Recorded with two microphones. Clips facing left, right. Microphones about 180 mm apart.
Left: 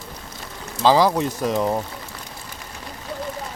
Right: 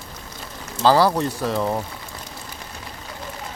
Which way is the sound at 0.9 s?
5° left (ahead or behind).